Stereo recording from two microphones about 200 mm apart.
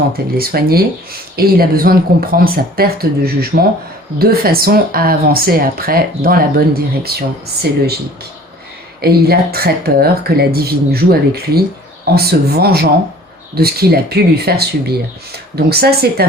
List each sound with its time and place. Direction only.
0.3 s speech: 50° right (ahead or behind)
9.0 s speech: 50° right (ahead or behind)